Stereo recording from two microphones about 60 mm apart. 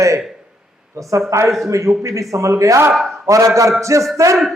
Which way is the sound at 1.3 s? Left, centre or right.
Right.